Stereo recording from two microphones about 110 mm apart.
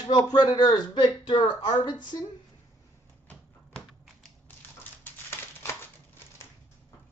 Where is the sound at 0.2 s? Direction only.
35° left (ahead or behind).